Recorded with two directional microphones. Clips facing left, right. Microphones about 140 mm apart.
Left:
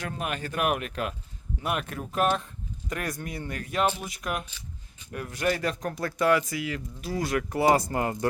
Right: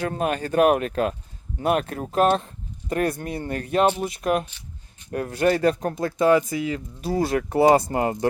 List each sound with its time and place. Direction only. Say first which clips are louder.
0.1 s speech: right 8 dB; 35° right (ahead or behind)